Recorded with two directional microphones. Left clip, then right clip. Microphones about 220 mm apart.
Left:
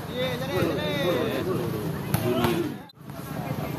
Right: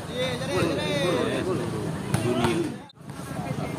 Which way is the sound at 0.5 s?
45° right (ahead or behind).